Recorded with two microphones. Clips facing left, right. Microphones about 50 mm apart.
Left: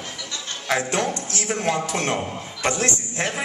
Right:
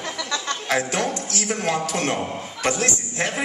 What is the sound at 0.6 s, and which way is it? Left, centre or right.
A man's voice, left.